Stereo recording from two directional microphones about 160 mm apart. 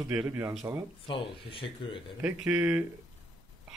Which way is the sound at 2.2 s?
10° right (ahead or behind).